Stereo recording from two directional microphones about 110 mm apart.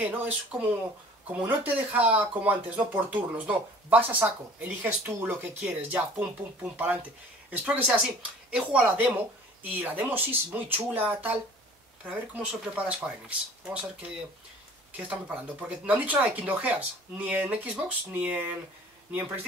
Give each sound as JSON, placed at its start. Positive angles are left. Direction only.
{"t": 0.0, "sound": "speech", "side_deg": -15}
{"t": 14.9, "sound": "speech", "side_deg": -15}